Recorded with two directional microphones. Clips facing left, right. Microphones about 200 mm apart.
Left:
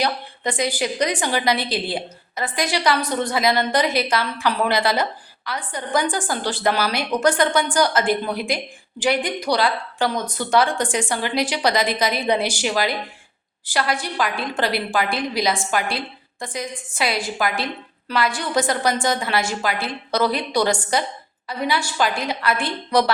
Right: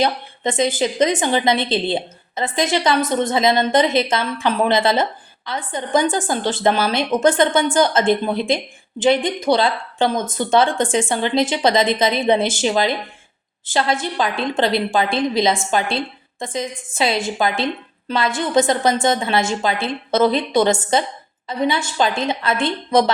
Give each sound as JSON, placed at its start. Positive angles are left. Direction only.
{"t": 0.0, "sound": "a woman's voice", "side_deg": -25}